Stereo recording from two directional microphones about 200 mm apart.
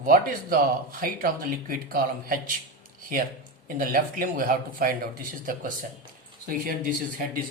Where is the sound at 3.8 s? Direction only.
45° right (ahead or behind).